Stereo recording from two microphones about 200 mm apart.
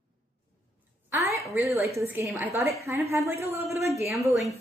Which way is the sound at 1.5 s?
15° right (ahead or behind).